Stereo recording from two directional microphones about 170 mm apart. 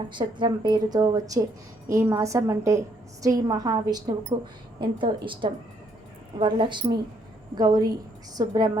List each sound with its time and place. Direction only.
0.1 s a woman's voice: 25° right (ahead or behind)